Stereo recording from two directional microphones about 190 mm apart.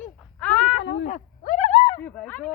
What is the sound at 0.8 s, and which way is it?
Speech, 65° left (ahead or behind).